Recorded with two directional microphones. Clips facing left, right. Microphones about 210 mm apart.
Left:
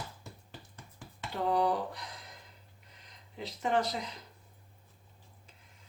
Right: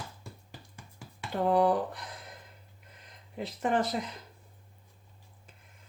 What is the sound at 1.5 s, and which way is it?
Speech, 50° right (ahead or behind).